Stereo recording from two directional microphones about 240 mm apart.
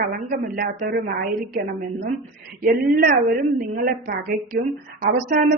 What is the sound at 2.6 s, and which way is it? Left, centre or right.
Speech, right.